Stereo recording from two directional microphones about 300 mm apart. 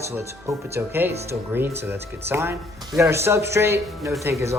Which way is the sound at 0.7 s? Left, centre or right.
Centre.